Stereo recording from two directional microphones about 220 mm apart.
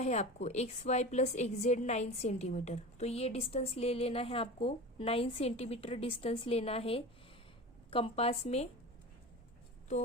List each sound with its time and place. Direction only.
0.0 s a woman's voice: 30° left (ahead or behind)